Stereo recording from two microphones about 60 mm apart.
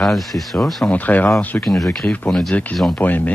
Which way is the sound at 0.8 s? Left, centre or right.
Left.